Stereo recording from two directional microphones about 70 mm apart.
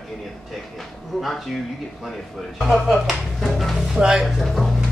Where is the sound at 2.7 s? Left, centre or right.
Centre.